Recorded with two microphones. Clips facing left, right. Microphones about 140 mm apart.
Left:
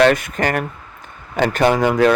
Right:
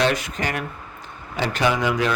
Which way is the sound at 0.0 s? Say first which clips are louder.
Left 7 dB; 55° left (ahead or behind).